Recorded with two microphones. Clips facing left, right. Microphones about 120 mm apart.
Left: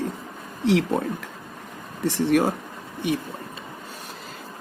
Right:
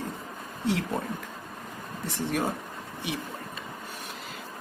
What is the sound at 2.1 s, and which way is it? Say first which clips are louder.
Speech: left 9 dB; 70° left (ahead or behind).